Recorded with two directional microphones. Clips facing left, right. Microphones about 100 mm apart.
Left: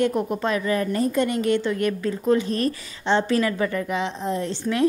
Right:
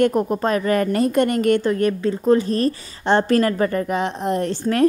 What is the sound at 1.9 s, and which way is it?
A woman's voice, 30° right (ahead or behind).